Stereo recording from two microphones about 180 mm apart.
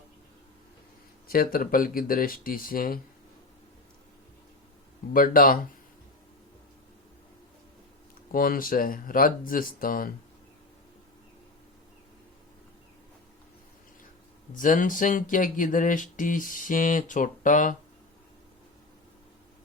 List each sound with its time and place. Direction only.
1.3 s speech: 55° left (ahead or behind)
5.1 s speech: 50° left (ahead or behind)
8.3 s speech: 50° left (ahead or behind)
14.5 s speech: 45° left (ahead or behind)